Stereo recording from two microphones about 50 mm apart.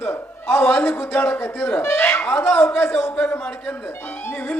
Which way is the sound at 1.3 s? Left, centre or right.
Left.